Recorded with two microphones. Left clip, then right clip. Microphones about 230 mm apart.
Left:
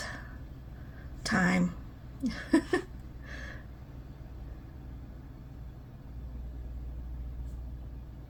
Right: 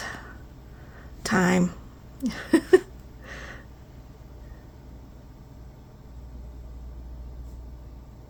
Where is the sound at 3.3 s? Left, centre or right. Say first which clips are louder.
Right 5 dB; right.